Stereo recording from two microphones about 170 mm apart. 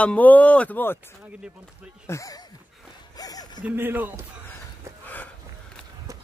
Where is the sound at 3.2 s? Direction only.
20° left (ahead or behind).